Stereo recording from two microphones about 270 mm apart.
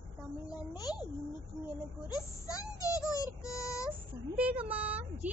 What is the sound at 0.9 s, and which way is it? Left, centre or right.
Speech, centre.